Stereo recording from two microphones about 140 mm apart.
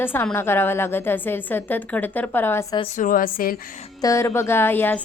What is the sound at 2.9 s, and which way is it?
Speech, 75° left (ahead or behind).